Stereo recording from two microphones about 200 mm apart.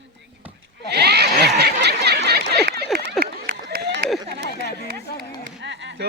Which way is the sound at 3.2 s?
50° right (ahead or behind).